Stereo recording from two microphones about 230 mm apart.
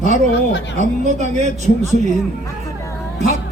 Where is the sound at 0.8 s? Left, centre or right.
Right.